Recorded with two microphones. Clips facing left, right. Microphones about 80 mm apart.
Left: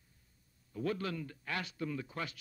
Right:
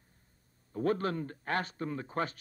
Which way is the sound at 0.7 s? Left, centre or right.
Right.